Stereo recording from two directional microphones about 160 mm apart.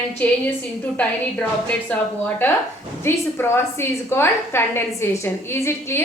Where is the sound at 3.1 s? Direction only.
15° left (ahead or behind).